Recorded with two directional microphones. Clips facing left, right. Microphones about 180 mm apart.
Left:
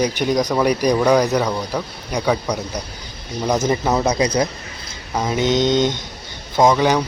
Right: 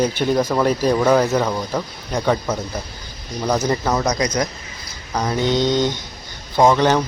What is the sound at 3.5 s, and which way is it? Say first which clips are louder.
Mantra: left 1 dB; 25° left (ahead or behind).